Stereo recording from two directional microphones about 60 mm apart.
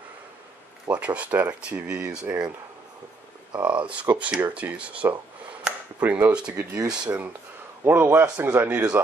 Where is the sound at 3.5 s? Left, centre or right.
Right.